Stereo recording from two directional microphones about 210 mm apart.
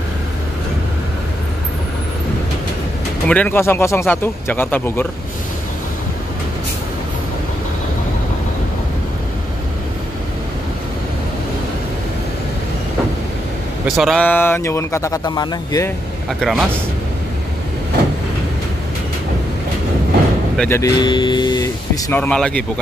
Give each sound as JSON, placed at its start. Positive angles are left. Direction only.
{"t": 3.3, "sound": "speech", "side_deg": 5}
{"t": 13.8, "sound": "speech", "side_deg": 0}
{"t": 16.3, "sound": "speech", "side_deg": 0}
{"t": 20.5, "sound": "speech", "side_deg": 10}
{"t": 22.1, "sound": "speech", "side_deg": 5}